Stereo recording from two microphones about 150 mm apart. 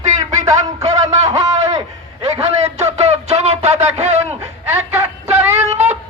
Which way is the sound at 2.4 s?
45° right (ahead or behind).